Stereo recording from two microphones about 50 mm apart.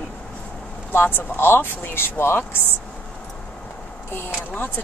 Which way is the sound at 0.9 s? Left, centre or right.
Left.